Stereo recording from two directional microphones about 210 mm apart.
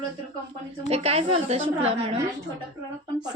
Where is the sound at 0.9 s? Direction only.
30° right (ahead or behind).